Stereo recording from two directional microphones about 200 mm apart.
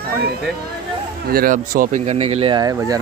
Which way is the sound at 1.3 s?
45° right (ahead or behind).